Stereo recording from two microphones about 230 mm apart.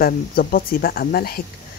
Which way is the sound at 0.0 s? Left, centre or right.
Left.